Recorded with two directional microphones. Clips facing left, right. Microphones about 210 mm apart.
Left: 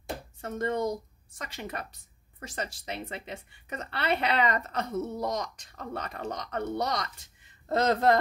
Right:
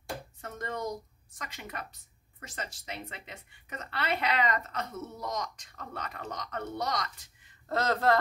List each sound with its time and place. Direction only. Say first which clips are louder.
0.0 s a sound: left 3 dB; 30° left (ahead or behind)
1.4 s a woman's voice: left 4 dB; 30° left (ahead or behind)
7.6 s a woman's voice: left 4 dB; 20° left (ahead or behind)